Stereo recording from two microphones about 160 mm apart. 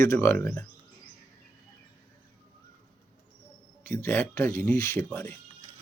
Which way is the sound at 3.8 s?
15° left (ahead or behind).